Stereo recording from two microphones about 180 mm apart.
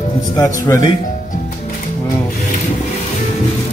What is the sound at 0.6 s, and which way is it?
Speech, 15° left (ahead or behind).